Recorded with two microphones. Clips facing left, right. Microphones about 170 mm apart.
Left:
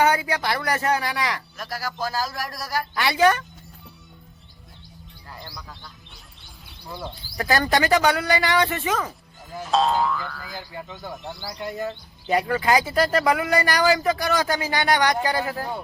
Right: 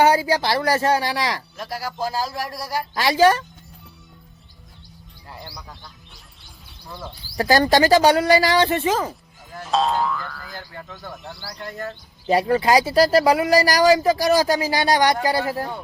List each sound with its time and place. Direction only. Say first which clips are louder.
0.0 s speech: right 4 dB; 30° right (ahead or behind)
5.3 s speech: right 2 dB; 15° right (ahead or behind)
6.8 s speech: left 2 dB; 15° left (ahead or behind)
7.3 s speech: right 5 dB; 30° right (ahead or behind)
9.5 s speech: even; centre (ahead or behind)
12.3 s speech: right 4 dB; 30° right (ahead or behind)